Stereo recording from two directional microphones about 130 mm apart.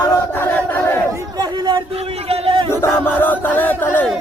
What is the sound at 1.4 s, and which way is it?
Speech, 35° right (ahead or behind).